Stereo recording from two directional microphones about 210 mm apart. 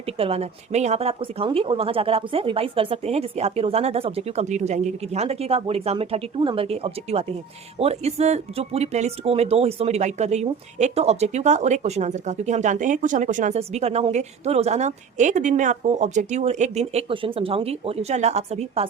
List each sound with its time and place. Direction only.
0.2 s speech: 30° right (ahead or behind)